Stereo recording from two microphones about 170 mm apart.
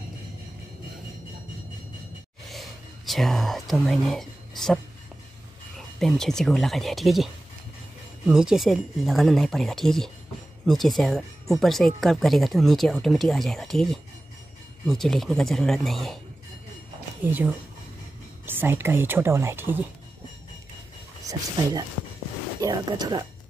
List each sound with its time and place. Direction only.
2.5 s speech: centre (ahead or behind)
5.9 s speech: centre (ahead or behind)
8.3 s speech: 5° right (ahead or behind)
17.2 s speech: 10° right (ahead or behind)
21.3 s speech: 20° right (ahead or behind)